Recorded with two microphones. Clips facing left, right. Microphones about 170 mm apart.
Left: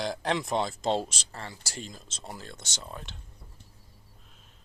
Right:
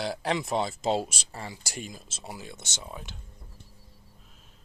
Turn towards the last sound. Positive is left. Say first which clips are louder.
# right 1 dB
turn(degrees=-5)  # may be behind; listen again after turning